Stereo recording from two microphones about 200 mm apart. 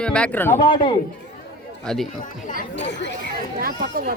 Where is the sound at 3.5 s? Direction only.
50° right (ahead or behind).